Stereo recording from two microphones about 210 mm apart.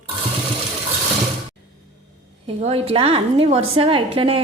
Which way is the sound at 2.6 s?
30° right (ahead or behind).